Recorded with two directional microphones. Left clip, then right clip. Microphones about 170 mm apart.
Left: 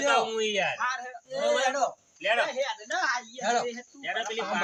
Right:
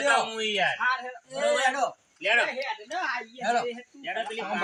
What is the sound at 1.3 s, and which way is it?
Speech, 50° left (ahead or behind).